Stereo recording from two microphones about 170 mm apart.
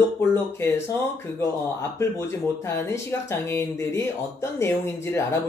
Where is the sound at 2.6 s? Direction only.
15° left (ahead or behind).